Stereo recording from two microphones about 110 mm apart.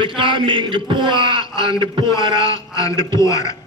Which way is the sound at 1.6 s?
35° left (ahead or behind).